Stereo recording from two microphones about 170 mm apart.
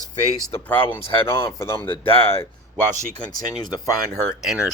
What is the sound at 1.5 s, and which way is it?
Speech, 15° left (ahead or behind).